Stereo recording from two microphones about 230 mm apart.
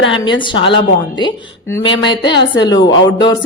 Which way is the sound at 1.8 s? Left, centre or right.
Left.